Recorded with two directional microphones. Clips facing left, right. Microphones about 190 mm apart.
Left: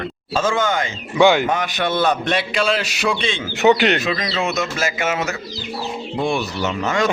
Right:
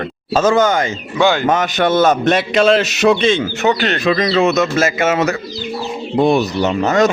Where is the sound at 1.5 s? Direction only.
45° right (ahead or behind).